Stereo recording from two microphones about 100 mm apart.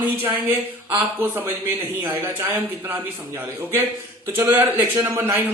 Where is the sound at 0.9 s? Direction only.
20° right (ahead or behind).